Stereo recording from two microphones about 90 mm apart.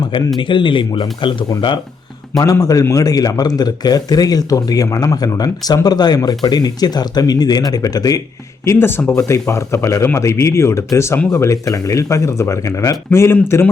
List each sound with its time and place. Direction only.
0.3 s speech: 65° left (ahead or behind)
2.4 s speech: 40° left (ahead or behind)
8.6 s speech: 25° left (ahead or behind)
13.1 s speech: 25° left (ahead or behind)